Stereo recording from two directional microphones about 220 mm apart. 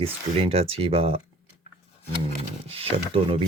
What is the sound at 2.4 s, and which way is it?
Speech, 25° right (ahead or behind).